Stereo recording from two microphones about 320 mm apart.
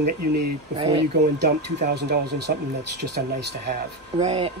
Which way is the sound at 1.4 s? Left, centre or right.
Right.